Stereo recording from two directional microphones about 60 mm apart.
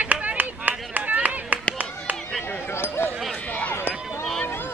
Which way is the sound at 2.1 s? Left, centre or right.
Right.